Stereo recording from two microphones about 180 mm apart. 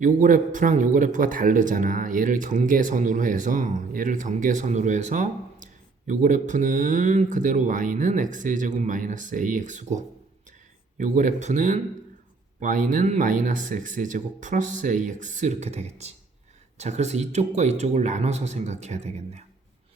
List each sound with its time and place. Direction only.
0.0 s a man's voice: 45° right (ahead or behind)